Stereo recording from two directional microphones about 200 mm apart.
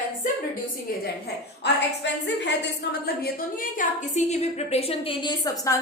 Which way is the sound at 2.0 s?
60° left (ahead or behind).